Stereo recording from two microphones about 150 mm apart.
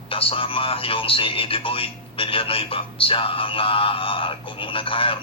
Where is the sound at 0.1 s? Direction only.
35° left (ahead or behind).